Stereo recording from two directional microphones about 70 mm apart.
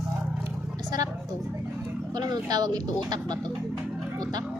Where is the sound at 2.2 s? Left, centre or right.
Right.